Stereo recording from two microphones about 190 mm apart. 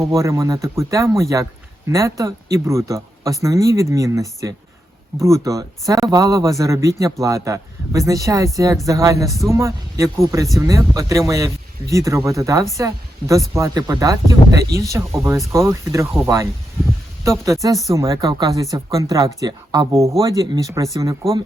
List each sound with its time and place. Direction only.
0.1 s a man's voice: 15° right (ahead or behind)